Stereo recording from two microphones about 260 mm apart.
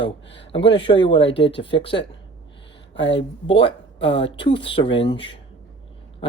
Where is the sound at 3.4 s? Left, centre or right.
Left.